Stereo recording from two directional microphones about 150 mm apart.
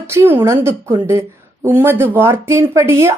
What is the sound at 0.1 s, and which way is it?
A woman's voice, 15° right (ahead or behind).